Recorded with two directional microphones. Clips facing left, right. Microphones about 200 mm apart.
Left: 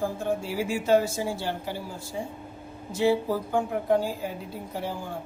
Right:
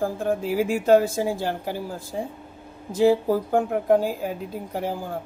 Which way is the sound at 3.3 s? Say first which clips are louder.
Right 5 dB; 50° right (ahead or behind).